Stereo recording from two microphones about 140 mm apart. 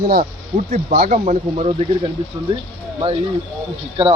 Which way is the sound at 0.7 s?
55° right (ahead or behind).